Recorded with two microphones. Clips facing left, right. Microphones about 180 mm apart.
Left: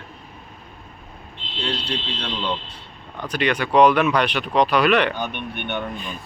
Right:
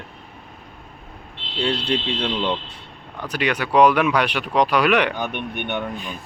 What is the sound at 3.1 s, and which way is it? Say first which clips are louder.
Speech: left 1 dB; 10° right (ahead or behind).